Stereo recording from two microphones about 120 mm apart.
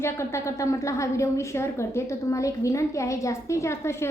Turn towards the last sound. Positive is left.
turn(degrees=20)  # may be behind; listen again after turning